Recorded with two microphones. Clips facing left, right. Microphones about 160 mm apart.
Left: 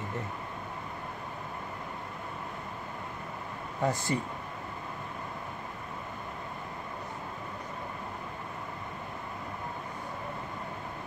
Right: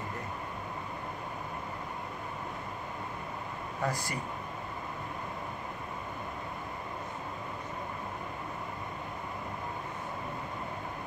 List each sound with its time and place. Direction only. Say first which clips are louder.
3.8 s speech: left 5 dB; 25° left (ahead or behind)